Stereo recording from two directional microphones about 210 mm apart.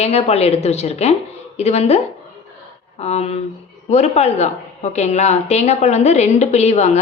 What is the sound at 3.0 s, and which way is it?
A woman's voice, 30° left (ahead or behind).